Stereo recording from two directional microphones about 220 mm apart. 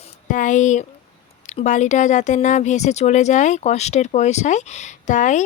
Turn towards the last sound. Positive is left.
turn(degrees=35)  # may be behind; listen again after turning